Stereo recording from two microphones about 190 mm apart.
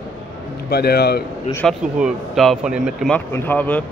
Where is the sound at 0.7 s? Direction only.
55° left (ahead or behind).